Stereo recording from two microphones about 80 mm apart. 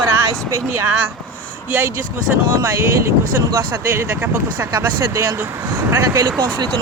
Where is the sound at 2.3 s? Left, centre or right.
Centre.